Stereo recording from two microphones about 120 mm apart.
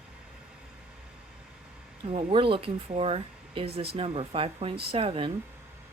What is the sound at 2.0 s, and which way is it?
Speech, 50° right (ahead or behind).